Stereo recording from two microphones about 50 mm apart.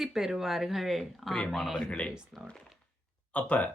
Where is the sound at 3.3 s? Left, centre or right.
Left.